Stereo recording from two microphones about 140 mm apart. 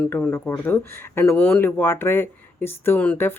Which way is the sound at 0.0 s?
10° left (ahead or behind).